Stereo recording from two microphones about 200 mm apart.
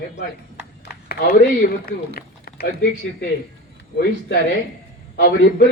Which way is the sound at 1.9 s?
50° left (ahead or behind).